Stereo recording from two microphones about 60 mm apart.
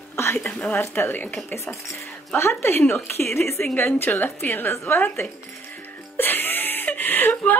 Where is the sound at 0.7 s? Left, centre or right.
Left.